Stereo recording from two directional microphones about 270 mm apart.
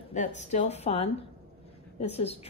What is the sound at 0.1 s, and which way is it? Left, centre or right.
A woman's voice, left.